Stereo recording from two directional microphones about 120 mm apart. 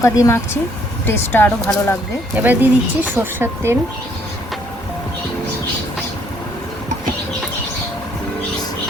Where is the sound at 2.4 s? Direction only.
15° right (ahead or behind).